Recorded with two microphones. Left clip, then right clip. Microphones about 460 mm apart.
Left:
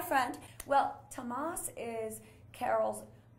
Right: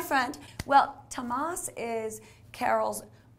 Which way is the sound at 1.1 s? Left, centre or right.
Right.